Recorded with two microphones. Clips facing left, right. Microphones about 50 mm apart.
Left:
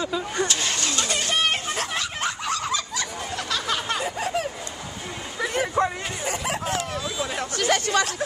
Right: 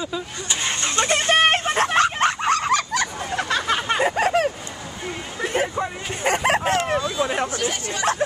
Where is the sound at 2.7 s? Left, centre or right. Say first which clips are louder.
Right 7 dB; right.